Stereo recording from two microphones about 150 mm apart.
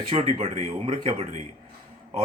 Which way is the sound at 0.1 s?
45° right (ahead or behind).